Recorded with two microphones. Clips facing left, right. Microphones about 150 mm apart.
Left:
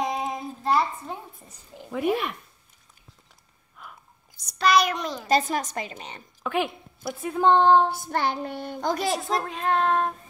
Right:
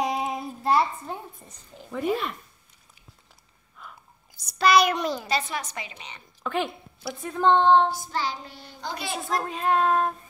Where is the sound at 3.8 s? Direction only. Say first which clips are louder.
Even; centre (ahead or behind).